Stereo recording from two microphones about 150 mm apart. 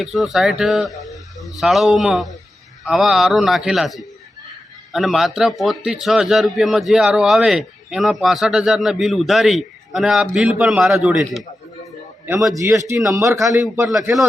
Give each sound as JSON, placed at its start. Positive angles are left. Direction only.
{"t": 0.0, "sound": "a man's voice", "side_deg": 0}
{"t": 12.5, "sound": "a man's voice", "side_deg": -20}